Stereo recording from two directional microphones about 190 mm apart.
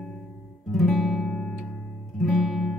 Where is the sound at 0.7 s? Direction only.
Centre (ahead or behind).